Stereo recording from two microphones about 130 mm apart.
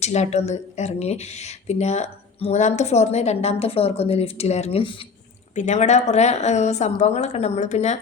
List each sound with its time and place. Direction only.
0.0 s speech: 60° left (ahead or behind)
4.8 s speech: 40° left (ahead or behind)
5.5 s speech: 60° left (ahead or behind)